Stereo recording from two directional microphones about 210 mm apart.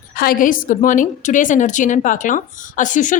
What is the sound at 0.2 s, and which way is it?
A woman's voice, 40° left (ahead or behind).